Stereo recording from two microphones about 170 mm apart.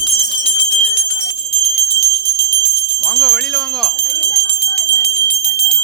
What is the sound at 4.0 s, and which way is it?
Jingle bell, 65° left (ahead or behind).